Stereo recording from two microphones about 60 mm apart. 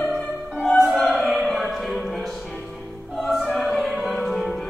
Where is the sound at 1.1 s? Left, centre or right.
Centre.